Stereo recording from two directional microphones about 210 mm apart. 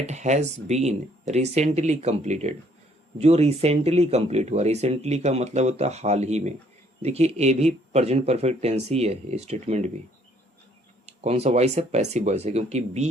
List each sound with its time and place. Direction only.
0.0 s speech: 35° right (ahead or behind)
11.0 s speech: 30° right (ahead or behind)